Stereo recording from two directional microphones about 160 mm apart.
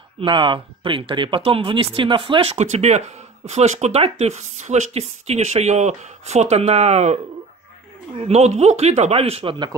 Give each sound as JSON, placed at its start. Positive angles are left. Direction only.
{"t": 0.2, "sound": "speech", "side_deg": -30}
{"t": 8.2, "sound": "speech", "side_deg": -45}